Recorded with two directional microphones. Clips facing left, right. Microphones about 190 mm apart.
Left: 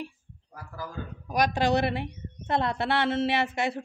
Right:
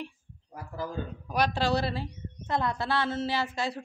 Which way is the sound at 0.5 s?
20° right (ahead or behind).